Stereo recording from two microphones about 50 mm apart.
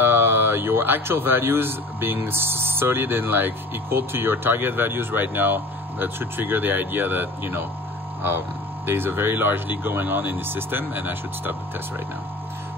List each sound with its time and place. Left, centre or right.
0.0 s speech: right
8.8 s speech: right